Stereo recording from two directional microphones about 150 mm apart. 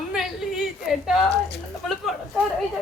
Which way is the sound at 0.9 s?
Centre (ahead or behind).